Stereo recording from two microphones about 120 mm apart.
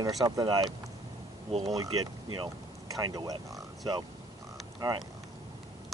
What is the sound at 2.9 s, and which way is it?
Speech, 30° right (ahead or behind).